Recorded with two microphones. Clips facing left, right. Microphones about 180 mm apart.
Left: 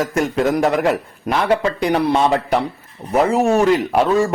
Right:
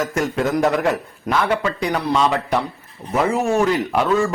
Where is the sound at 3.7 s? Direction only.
25° left (ahead or behind).